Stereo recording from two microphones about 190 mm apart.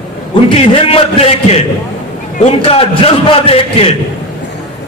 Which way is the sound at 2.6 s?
30° left (ahead or behind).